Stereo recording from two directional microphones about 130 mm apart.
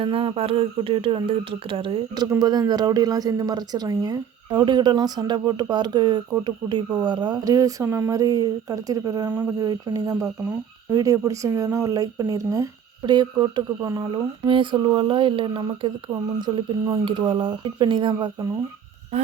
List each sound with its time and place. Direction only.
0.0 s speech: 45° right (ahead or behind)
2.2 s speech: 25° right (ahead or behind)